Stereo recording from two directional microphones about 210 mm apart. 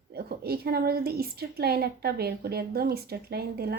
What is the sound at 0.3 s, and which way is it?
A woman's voice, 45° right (ahead or behind).